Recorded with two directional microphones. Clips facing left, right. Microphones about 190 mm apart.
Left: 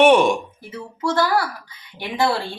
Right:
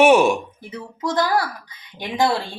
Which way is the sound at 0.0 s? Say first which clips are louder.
Even; 5° right (ahead or behind).